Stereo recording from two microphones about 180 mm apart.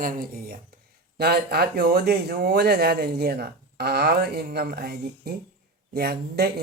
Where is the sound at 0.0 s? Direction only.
50° right (ahead or behind).